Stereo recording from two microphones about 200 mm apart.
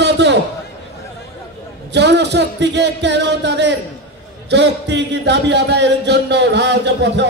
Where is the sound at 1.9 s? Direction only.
60° right (ahead or behind).